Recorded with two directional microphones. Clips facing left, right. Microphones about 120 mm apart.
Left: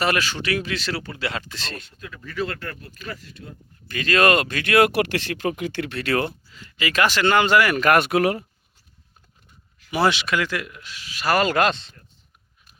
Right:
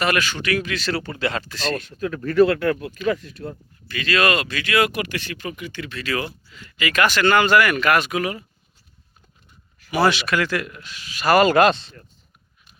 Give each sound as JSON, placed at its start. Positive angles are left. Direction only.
{"t": 0.0, "sound": "speech", "side_deg": 30}
{"t": 0.9, "sound": "speech", "side_deg": 0}
{"t": 1.5, "sound": "speech", "side_deg": 25}
{"t": 1.7, "sound": "speech", "side_deg": -55}
{"t": 3.8, "sound": "speech", "side_deg": 45}
{"t": 6.5, "sound": "speech", "side_deg": 30}
{"t": 7.8, "sound": "speech", "side_deg": 50}
{"t": 9.9, "sound": "speech", "side_deg": 25}